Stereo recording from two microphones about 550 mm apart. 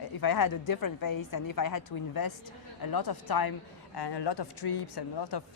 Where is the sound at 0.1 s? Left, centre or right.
Left.